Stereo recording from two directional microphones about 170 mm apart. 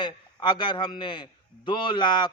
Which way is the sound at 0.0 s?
25° left (ahead or behind).